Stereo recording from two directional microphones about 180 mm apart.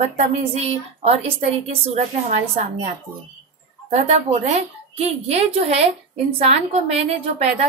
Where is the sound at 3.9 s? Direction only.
40° right (ahead or behind).